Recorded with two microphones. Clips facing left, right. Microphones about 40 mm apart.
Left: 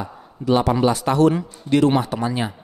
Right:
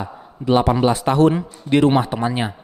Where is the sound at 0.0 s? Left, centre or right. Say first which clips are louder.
Right 1 dB; right.